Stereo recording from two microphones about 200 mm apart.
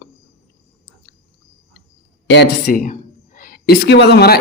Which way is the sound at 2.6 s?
40° left (ahead or behind).